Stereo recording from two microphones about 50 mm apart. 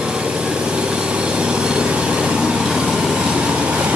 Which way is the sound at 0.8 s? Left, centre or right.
Centre.